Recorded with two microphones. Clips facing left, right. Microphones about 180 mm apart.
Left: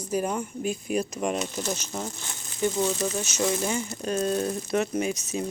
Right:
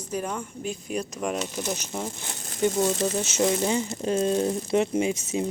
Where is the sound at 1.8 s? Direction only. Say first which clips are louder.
Right 1 dB; 15° right (ahead or behind).